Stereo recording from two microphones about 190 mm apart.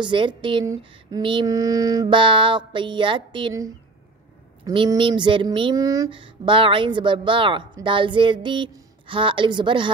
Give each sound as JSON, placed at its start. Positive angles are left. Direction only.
{"t": 0.0, "sound": "speech", "side_deg": -25}